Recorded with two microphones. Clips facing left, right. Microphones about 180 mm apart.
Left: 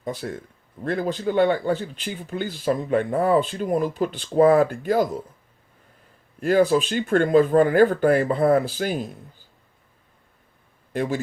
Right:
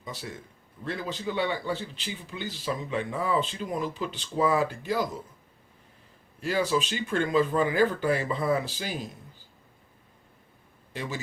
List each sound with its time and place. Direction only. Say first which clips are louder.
0.0 s speech: left 9 dB; 55° left (ahead or behind)
6.4 s speech: left 8 dB; 50° left (ahead or behind)
10.9 s speech: left 10 dB; 50° left (ahead or behind)